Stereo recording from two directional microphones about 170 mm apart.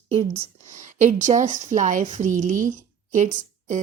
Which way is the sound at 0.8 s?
45° right (ahead or behind).